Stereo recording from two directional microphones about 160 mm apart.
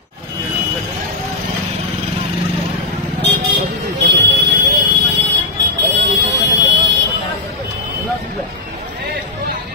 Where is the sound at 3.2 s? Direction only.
90° right.